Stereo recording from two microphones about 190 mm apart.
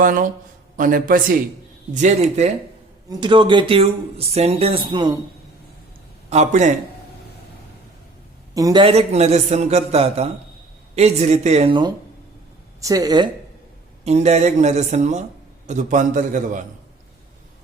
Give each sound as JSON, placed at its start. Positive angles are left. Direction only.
{"t": 0.0, "sound": "a man's voice", "side_deg": -45}
{"t": 3.1, "sound": "speech", "side_deg": -25}
{"t": 6.3, "sound": "a man's voice", "side_deg": -35}
{"t": 8.5, "sound": "speech", "side_deg": -20}
{"t": 8.8, "sound": "a man's voice", "side_deg": -30}
{"t": 12.8, "sound": "speech", "side_deg": -20}
{"t": 14.0, "sound": "a man's voice", "side_deg": -35}